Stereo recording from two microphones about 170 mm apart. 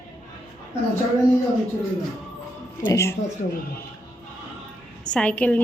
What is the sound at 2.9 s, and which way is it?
Speech, 15° left (ahead or behind).